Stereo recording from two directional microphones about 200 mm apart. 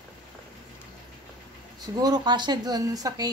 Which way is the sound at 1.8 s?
20° right (ahead or behind).